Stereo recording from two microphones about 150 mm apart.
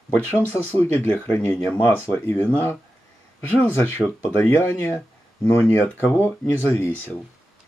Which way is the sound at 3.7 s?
15° left (ahead or behind).